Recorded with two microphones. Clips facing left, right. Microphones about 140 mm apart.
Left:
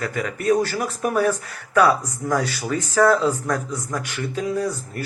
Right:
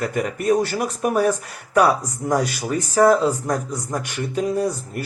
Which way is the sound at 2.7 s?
30° right (ahead or behind).